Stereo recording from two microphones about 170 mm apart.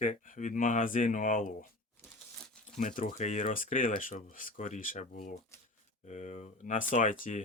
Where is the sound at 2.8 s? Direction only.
50° left (ahead or behind).